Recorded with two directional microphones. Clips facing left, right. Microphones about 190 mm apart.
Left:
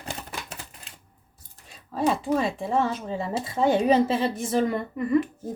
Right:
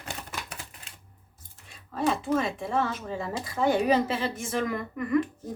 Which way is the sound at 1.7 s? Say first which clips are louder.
Left 3 dB; 35° left (ahead or behind).